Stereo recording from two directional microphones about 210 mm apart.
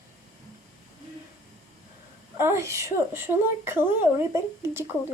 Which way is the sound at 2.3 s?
10° right (ahead or behind).